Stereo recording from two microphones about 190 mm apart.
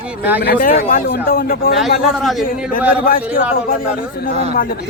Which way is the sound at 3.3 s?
50° left (ahead or behind).